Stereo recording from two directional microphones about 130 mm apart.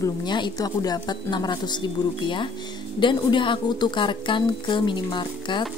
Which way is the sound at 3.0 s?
40° left (ahead or behind).